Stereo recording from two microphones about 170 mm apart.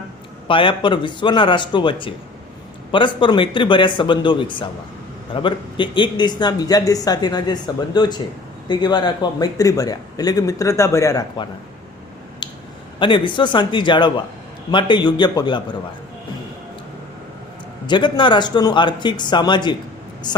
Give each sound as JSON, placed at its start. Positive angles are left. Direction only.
{"t": 0.4, "sound": "a man's voice", "side_deg": 30}
{"t": 12.4, "sound": "a sound", "side_deg": 30}
{"t": 13.0, "sound": "a man's voice", "side_deg": 30}
{"t": 17.8, "sound": "a man's voice", "side_deg": 25}